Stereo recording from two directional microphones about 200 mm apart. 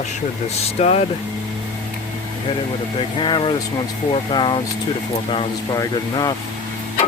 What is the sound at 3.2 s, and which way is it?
Speech, 25° left (ahead or behind).